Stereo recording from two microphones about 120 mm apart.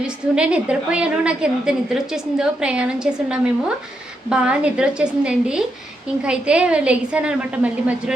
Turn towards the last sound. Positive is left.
turn(degrees=-15)  # may be behind; listen again after turning